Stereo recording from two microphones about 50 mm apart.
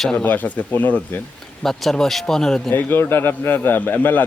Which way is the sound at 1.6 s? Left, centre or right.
Centre.